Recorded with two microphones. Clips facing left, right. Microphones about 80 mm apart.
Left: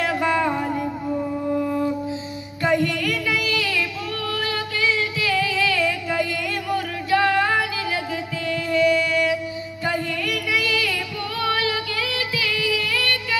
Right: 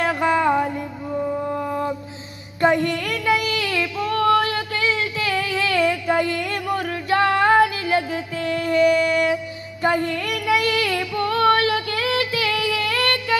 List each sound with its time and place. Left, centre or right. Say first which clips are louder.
0.0 s music: right 2 dB; right
2.6 s child singing: right 2 dB; right
6.7 s music: even; right
9.8 s female singing: right 4 dB; right